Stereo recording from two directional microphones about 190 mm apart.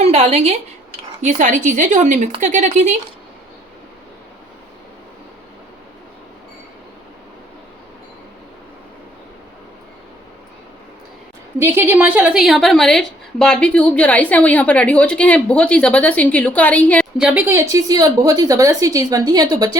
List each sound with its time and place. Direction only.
0.0 s a woman's voice: 35° right (ahead or behind)
11.6 s a woman's voice: 10° right (ahead or behind); by 17.1 s 5° left (ahead or behind)
17.2 s a woman's voice: 5° right (ahead or behind)